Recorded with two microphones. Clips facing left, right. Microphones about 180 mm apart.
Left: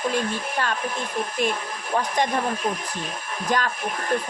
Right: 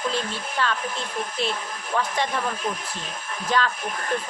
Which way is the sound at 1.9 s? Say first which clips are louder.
Left 2 dB; 40° left (ahead or behind).